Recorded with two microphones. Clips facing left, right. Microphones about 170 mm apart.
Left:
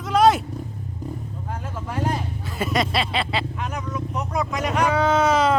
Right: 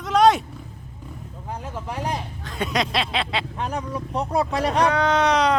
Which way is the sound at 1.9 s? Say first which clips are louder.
Left 3 dB; 15° right (ahead or behind).